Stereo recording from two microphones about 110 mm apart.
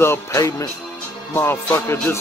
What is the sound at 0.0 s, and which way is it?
Speech, 25° left (ahead or behind).